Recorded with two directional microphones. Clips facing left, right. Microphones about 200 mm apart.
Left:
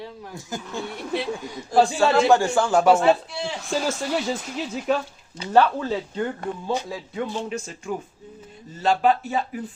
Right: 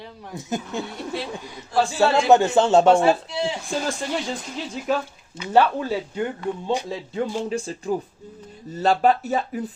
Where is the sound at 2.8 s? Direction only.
5° left (ahead or behind).